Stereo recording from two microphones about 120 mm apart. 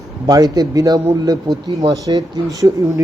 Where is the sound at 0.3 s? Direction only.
35° right (ahead or behind).